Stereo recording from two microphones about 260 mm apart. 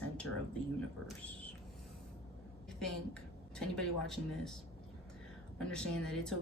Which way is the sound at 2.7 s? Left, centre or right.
Centre.